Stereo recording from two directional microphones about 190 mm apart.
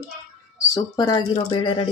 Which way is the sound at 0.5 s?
20° left (ahead or behind).